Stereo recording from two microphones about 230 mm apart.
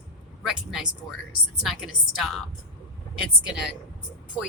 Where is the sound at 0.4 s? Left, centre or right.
Centre.